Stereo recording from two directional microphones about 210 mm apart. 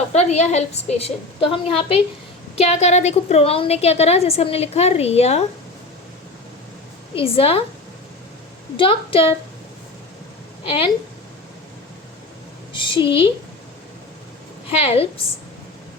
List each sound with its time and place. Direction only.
0.1 s a woman's voice: 30° left (ahead or behind)
7.2 s a woman's voice: 25° left (ahead or behind)
8.7 s a woman's voice: 25° left (ahead or behind)
10.6 s a woman's voice: 25° left (ahead or behind)
12.7 s a woman's voice: 25° left (ahead or behind)
14.7 s a woman's voice: 30° left (ahead or behind)